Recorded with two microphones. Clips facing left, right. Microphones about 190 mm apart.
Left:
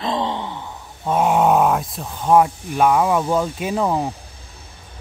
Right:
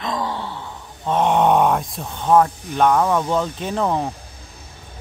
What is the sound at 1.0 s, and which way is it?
Speech, 5° left (ahead or behind).